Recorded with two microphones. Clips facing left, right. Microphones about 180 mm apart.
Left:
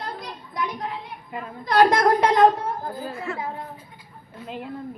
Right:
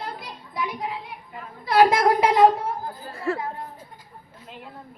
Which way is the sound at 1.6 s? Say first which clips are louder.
Even; 5° right (ahead or behind).